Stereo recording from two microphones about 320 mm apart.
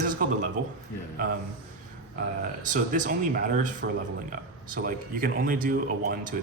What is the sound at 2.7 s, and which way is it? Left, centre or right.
A man's voice, right.